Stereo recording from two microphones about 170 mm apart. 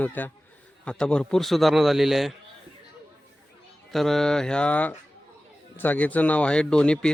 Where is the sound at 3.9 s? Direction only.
Centre (ahead or behind).